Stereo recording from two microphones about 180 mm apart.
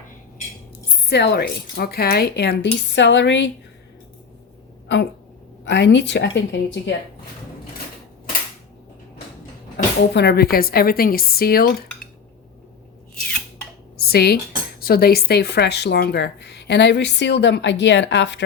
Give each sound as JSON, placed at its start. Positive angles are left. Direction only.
{"t": 1.0, "sound": "a woman's voice", "side_deg": 65}
{"t": 5.6, "sound": "speech", "side_deg": 75}
{"t": 9.7, "sound": "a woman's voice", "side_deg": 70}
{"t": 14.0, "sound": "a woman's voice", "side_deg": 60}